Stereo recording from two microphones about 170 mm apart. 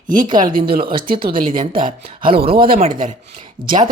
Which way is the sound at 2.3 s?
65° right (ahead or behind).